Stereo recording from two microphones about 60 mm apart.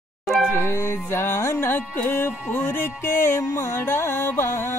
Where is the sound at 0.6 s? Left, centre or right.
Left.